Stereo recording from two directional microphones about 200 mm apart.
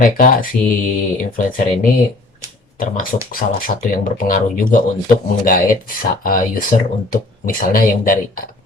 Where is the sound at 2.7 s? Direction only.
45° left (ahead or behind).